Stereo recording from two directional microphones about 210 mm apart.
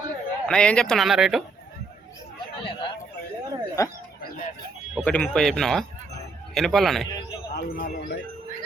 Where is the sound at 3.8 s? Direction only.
15° left (ahead or behind).